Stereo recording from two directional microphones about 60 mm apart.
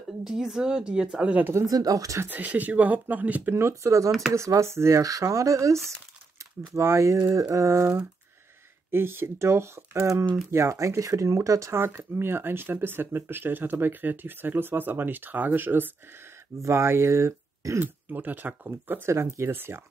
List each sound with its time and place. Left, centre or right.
0.2 s a woman's voice: centre
1.7 s speech: right
2.2 s speech: right
3.5 s speech: right
11.0 s speech: right
11.7 s speech: right
16.6 s speech: right
17.7 s speech: right